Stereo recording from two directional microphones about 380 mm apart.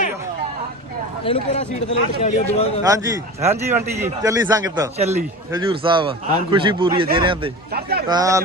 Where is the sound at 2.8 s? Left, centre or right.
Centre.